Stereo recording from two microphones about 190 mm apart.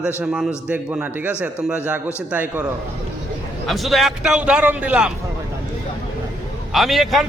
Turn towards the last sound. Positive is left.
turn(degrees=0)  # may be behind; listen again after turning